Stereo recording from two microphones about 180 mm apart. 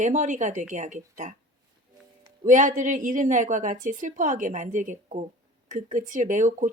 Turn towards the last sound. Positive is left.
turn(degrees=-45)  # may be behind; listen again after turning